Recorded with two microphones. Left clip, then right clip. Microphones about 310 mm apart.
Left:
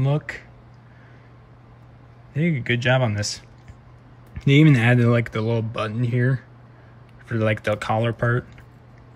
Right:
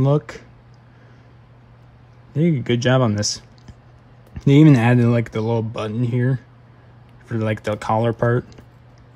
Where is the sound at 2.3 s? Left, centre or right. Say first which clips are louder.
Right 3 dB; centre.